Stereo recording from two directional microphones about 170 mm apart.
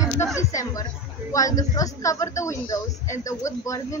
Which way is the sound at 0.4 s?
20° left (ahead or behind).